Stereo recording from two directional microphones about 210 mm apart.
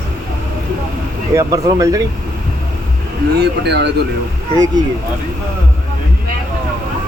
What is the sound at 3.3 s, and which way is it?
Speech, 50° right (ahead or behind).